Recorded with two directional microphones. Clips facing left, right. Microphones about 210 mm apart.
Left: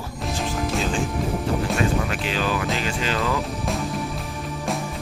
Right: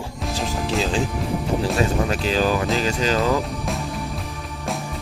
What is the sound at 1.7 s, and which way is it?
Speech, 35° right (ahead or behind).